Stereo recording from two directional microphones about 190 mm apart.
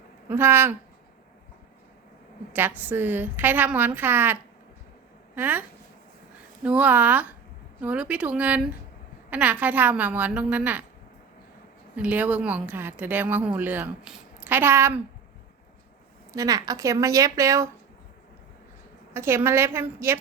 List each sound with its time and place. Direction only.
0.3 s speech: 10° right (ahead or behind)
2.5 s speech: 10° right (ahead or behind)
11.9 s speech: 10° right (ahead or behind)
16.3 s speech: 20° right (ahead or behind)
19.1 s speech: 15° right (ahead or behind)